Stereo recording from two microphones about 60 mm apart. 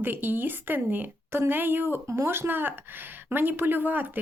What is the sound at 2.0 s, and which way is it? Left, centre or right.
Speech, right.